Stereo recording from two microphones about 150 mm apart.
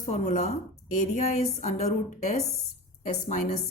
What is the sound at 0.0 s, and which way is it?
A woman's voice, 50° left (ahead or behind).